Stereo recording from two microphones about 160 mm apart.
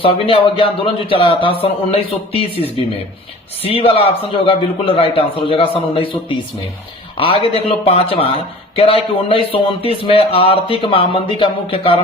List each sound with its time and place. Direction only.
0.0 s speech: 35° left (ahead or behind)